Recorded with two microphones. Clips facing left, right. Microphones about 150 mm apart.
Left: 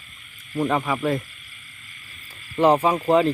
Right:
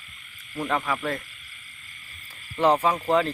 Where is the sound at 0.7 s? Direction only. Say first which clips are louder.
Left 3 dB; 15° left (ahead or behind).